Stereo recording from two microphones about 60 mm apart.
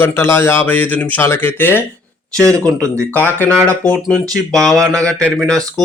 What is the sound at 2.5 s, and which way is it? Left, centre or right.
A man's voice, left.